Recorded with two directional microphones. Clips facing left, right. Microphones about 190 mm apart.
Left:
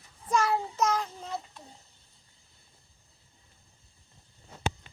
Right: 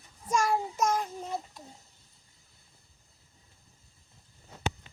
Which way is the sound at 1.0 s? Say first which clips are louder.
Right 2 dB; 15° right (ahead or behind).